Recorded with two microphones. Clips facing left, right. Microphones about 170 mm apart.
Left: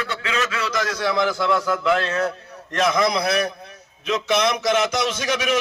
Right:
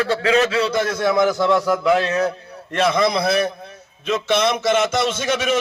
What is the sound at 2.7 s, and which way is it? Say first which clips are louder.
A man's voice: right 2 dB; 30° right (ahead or behind).